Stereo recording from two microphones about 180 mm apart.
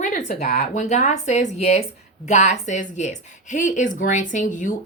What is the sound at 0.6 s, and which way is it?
Speech, 45° left (ahead or behind).